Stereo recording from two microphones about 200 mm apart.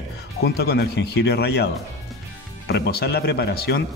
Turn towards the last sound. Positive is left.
turn(degrees=55)  # may be behind; listen again after turning